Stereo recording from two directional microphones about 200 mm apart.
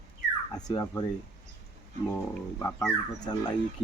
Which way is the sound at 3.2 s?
20° left (ahead or behind).